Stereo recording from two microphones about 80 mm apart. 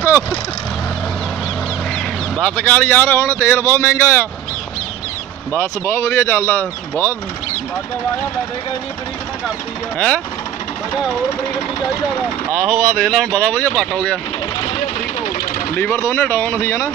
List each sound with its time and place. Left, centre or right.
2.3 s speech: centre; by 4.3 s left
5.5 s speech: left
9.9 s speech: centre
12.5 s speech: centre
15.7 s speech: left